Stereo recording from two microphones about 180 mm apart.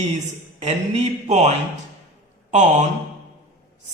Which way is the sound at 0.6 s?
40° right (ahead or behind).